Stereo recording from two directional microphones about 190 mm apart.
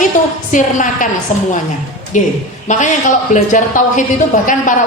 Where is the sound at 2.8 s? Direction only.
40° left (ahead or behind).